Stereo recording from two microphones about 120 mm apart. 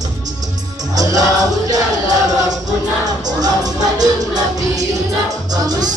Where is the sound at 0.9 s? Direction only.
30° right (ahead or behind).